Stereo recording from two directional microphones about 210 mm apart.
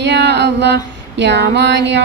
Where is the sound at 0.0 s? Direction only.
55° right (ahead or behind).